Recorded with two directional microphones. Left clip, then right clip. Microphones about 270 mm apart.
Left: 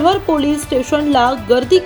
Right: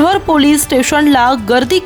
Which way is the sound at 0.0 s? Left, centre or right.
Right.